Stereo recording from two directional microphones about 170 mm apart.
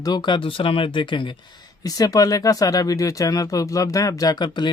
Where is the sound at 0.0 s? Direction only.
25° left (ahead or behind).